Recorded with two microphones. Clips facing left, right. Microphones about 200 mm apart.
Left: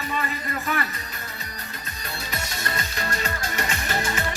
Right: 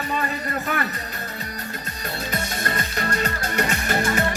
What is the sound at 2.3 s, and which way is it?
Music, 50° right (ahead or behind).